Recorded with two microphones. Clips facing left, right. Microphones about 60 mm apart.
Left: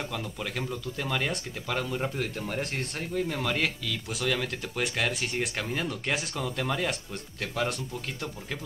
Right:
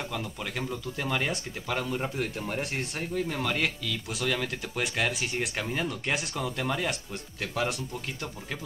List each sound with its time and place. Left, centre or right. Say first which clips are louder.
0.1 s speech: even; centre